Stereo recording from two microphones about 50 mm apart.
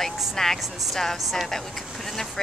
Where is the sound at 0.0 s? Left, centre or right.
Centre.